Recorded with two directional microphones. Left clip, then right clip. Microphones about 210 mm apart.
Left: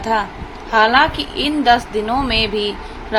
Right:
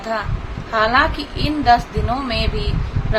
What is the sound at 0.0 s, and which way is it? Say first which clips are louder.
A woman's voice: left 5 dB; 10° left (ahead or behind).